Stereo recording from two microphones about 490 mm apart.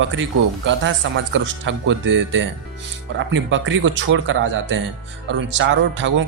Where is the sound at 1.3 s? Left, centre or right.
Right.